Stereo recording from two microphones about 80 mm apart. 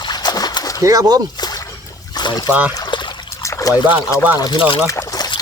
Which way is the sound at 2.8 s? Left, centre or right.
Left.